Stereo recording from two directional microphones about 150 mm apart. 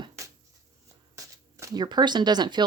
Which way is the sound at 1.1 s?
20° right (ahead or behind).